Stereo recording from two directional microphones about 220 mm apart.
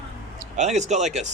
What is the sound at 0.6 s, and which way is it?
Speech, 30° right (ahead or behind).